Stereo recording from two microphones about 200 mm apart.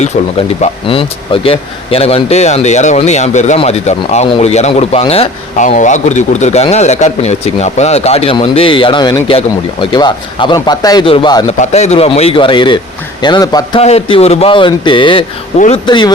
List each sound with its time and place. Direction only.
0.6 s speech: 25° left (ahead or behind)
11.5 s speech: 35° left (ahead or behind); by 13.8 s 20° left (ahead or behind)
13.8 s speech: 30° left (ahead or behind)
15.5 s speech: 35° left (ahead or behind)
15.9 s speech: 20° left (ahead or behind)